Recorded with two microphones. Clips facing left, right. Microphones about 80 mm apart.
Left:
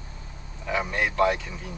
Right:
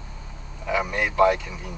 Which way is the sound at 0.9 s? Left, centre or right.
Centre.